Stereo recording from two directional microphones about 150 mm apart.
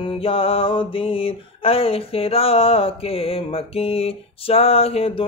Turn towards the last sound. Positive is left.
turn(degrees=40)  # may be behind; listen again after turning